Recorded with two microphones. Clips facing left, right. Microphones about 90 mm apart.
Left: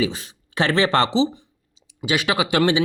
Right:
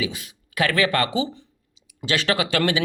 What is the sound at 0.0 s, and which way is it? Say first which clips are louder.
Speech: left 5 dB; 35° left (ahead or behind).